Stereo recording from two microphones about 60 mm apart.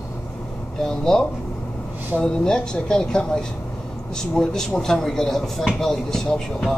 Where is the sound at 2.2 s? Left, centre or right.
Centre.